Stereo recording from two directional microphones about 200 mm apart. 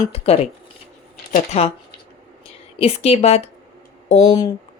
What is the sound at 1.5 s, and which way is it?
Speech, 30° left (ahead or behind).